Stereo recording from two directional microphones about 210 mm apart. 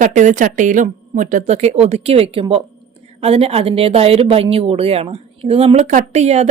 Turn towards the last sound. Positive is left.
turn(degrees=-30)  # may be behind; listen again after turning